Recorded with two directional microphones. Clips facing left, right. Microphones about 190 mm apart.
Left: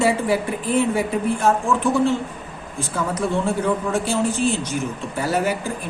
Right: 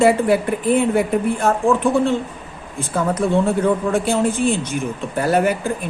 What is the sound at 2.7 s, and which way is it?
Speech, 55° right (ahead or behind).